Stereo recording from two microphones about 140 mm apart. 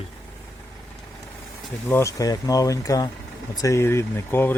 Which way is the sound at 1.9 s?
20° left (ahead or behind).